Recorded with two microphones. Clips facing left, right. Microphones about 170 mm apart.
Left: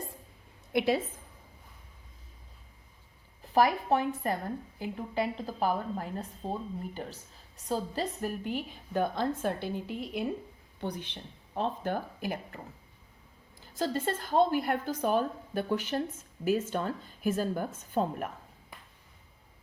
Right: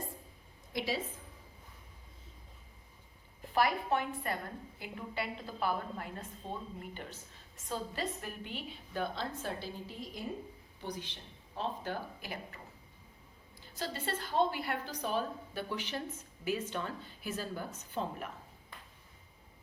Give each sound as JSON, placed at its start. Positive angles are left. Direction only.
{"t": 0.7, "sound": "a woman's voice", "side_deg": 60}
{"t": 3.5, "sound": "a woman's voice", "side_deg": 40}
{"t": 13.7, "sound": "a woman's voice", "side_deg": 45}